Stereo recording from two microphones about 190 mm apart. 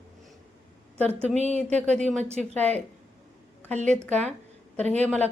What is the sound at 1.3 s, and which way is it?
Speech, 35° right (ahead or behind).